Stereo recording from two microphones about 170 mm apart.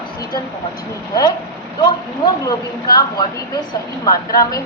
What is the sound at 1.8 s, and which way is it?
A woman's voice, 25° left (ahead or behind).